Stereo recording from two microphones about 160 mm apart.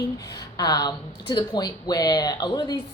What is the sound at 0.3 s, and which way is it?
A woman's voice, 25° left (ahead or behind).